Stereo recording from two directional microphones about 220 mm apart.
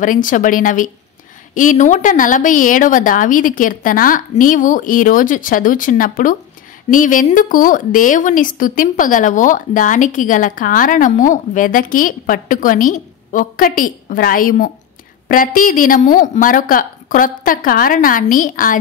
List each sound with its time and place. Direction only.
0.0 s a woman's voice: 35° left (ahead or behind)